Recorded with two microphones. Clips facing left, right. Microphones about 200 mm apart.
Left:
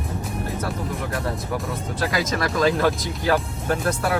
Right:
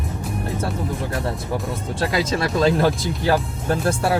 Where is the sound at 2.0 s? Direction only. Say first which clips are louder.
Right 2 dB; 30° right (ahead or behind).